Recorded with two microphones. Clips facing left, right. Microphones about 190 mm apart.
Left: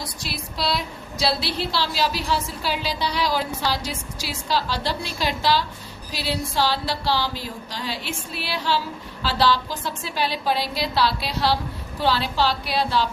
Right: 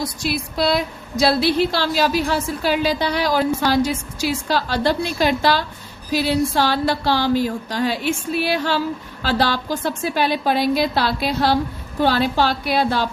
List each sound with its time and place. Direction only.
0.0 s a woman's voice: 50° right (ahead or behind)